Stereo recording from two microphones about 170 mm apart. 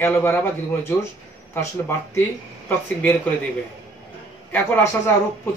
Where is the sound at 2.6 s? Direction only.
10° left (ahead or behind).